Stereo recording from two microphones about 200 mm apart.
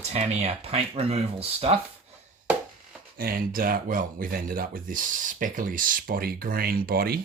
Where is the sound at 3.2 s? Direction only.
45° right (ahead or behind).